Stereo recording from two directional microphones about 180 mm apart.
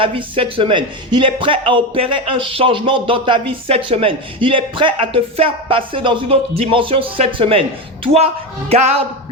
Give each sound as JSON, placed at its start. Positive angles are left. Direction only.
{"t": 0.0, "sound": "speech", "side_deg": -30}